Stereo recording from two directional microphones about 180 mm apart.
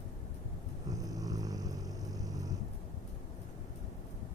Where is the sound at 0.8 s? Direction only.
20° right (ahead or behind).